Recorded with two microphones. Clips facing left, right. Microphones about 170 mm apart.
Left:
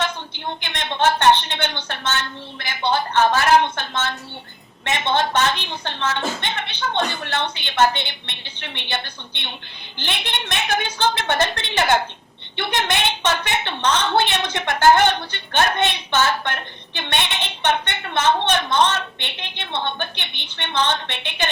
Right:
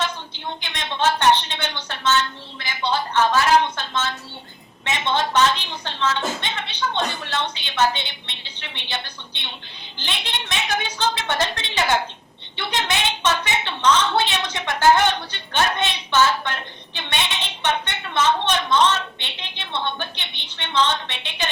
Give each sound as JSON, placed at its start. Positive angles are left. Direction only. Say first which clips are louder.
{"t": 0.3, "sound": "a woman's voice", "louder": "left 2 dB", "side_deg": 55}